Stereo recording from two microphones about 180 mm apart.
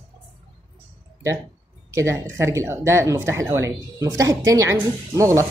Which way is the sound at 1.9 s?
15° right (ahead or behind).